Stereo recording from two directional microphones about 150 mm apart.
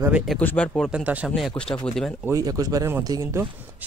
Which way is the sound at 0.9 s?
5° right (ahead or behind).